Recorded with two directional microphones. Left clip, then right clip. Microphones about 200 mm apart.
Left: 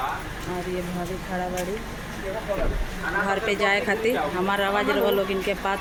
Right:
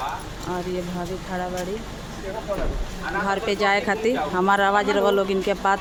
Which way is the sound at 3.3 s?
25° right (ahead or behind).